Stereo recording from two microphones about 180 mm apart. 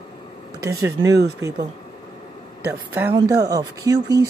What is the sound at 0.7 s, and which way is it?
Speech, 20° right (ahead or behind).